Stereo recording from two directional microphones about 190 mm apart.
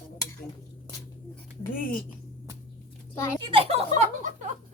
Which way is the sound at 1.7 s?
50° left (ahead or behind).